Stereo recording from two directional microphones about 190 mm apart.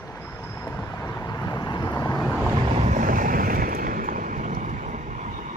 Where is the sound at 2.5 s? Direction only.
35° right (ahead or behind).